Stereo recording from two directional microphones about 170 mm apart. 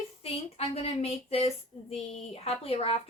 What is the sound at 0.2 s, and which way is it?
Speech, 35° left (ahead or behind).